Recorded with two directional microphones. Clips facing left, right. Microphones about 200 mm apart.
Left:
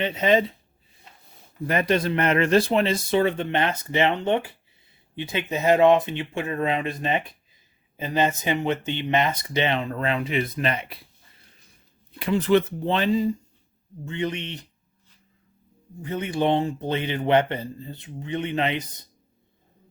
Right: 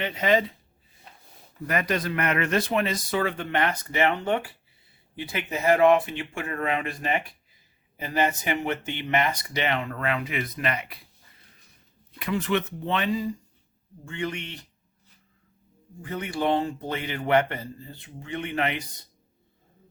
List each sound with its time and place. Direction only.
0.0 s speech: 25° left (ahead or behind)
1.6 s speech: 25° left (ahead or behind)
12.2 s speech: 30° left (ahead or behind)
16.0 s speech: 20° left (ahead or behind)